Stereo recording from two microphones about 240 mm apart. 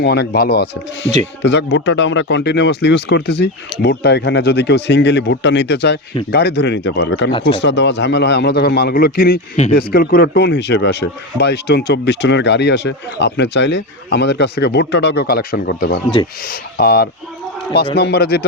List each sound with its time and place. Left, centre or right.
0.0 s speech: left